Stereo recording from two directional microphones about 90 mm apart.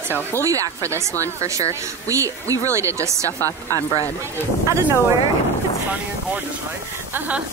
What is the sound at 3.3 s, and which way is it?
Speech, 25° left (ahead or behind).